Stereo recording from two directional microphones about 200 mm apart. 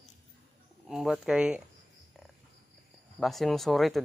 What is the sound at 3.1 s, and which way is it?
Speech, centre (ahead or behind).